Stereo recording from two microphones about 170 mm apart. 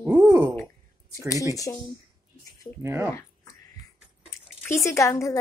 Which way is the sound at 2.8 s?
15° right (ahead or behind).